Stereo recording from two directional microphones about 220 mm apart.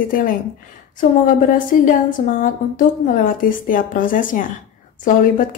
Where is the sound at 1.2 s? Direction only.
35° left (ahead or behind).